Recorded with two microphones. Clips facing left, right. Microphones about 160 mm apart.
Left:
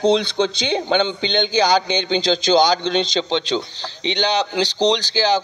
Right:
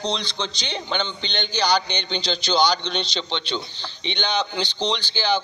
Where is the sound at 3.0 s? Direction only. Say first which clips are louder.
Left 8 dB; 90° left.